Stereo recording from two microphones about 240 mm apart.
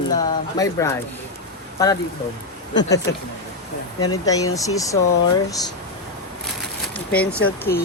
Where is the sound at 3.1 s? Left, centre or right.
Centre.